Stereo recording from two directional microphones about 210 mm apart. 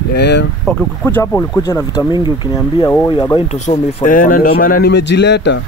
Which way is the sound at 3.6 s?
35° left (ahead or behind).